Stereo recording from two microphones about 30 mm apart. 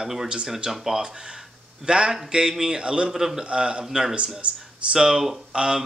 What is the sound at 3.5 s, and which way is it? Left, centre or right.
Speech, right.